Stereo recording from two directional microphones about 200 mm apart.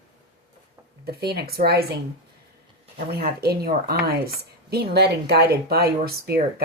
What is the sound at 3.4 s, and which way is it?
Speech, 50° right (ahead or behind).